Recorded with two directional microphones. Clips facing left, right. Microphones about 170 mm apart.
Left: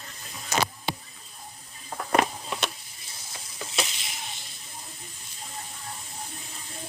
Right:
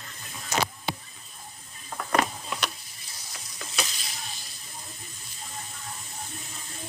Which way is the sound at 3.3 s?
25° left (ahead or behind).